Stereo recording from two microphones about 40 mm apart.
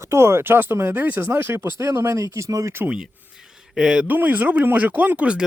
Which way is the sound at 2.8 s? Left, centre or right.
Right.